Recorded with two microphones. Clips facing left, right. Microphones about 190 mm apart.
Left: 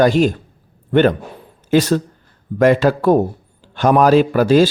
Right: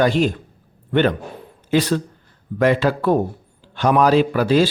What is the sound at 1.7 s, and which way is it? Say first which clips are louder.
A man's voice: left 4 dB; 45° left (ahead or behind).